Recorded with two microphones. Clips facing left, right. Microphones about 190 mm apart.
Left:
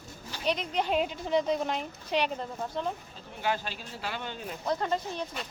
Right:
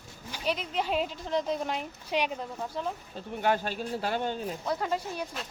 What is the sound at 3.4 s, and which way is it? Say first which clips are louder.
Speech: right 4 dB; 50° right (ahead or behind).